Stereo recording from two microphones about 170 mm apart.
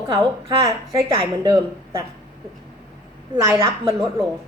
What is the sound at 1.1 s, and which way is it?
Speech, 30° right (ahead or behind).